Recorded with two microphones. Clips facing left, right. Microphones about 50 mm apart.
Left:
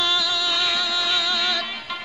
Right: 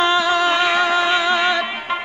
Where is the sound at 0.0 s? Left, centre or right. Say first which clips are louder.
Right 8 dB; right.